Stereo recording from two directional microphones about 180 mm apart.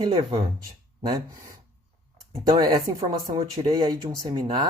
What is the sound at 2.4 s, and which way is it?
Speech, 25° right (ahead or behind).